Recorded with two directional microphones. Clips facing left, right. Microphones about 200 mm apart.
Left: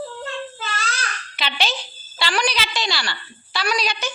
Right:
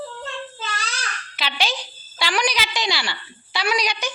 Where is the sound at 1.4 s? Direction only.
10° right (ahead or behind).